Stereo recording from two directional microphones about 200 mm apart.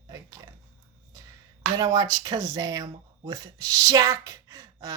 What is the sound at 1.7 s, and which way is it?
Speech, 20° right (ahead or behind).